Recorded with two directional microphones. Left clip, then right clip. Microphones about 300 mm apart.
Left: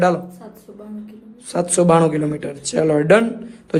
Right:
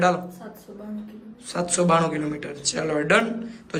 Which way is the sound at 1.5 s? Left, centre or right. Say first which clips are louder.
Left 6 dB; centre.